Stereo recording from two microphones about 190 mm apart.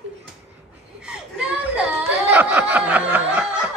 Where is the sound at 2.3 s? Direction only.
10° right (ahead or behind).